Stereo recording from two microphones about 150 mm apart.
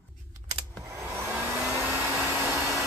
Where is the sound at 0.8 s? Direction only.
20° right (ahead or behind).